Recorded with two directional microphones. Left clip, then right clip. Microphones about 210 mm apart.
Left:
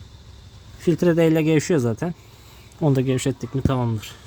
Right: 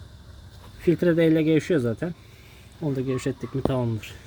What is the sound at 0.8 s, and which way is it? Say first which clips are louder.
Speech: left 2 dB; 30° left (ahead or behind).